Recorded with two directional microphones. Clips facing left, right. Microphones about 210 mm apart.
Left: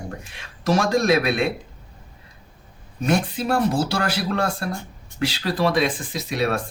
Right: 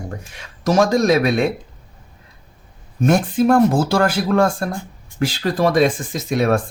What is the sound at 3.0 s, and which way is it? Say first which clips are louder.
Speech: right 6 dB; 50° right (ahead or behind).